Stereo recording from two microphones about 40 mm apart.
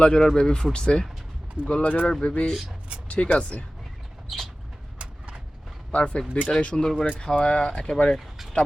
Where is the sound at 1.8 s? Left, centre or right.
Left.